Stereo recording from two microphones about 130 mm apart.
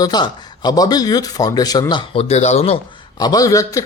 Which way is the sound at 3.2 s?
30° left (ahead or behind).